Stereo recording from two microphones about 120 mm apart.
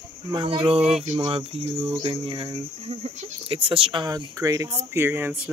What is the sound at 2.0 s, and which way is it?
Speech, 45° right (ahead or behind).